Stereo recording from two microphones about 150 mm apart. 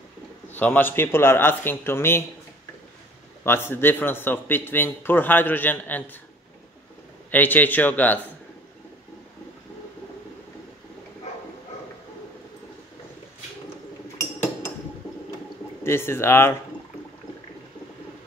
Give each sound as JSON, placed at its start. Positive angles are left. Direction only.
{"t": 0.5, "sound": "a man's voice", "side_deg": 10}
{"t": 3.4, "sound": "a man's voice", "side_deg": 15}
{"t": 7.2, "sound": "a man's voice", "side_deg": 10}
{"t": 15.8, "sound": "a man's voice", "side_deg": 15}